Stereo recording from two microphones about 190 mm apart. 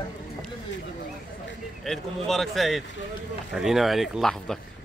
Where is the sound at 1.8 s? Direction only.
Centre (ahead or behind).